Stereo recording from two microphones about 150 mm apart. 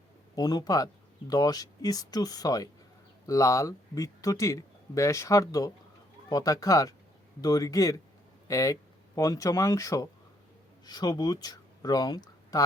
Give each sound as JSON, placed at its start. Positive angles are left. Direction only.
{"t": 0.3, "sound": "speech", "side_deg": 25}